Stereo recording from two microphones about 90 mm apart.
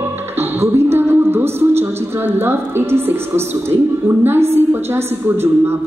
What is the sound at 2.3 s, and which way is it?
Speech, 25° right (ahead or behind).